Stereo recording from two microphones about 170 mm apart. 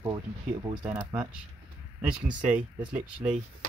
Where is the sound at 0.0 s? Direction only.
25° right (ahead or behind).